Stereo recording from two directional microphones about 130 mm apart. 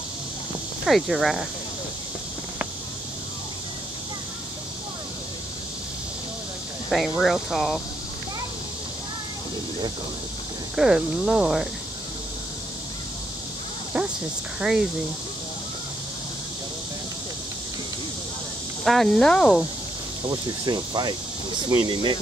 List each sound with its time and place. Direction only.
0.8 s speech: centre (ahead or behind)
6.9 s speech: centre (ahead or behind)
10.8 s speech: 5° right (ahead or behind)
13.9 s speech: 5° right (ahead or behind)
18.9 s speech: 5° left (ahead or behind)
20.2 s cricket: 30° right (ahead or behind)